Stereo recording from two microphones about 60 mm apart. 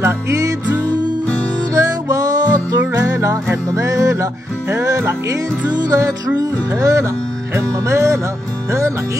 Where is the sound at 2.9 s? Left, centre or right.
Right.